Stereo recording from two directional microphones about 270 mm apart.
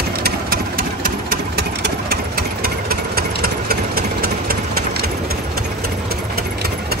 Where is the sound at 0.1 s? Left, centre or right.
Right.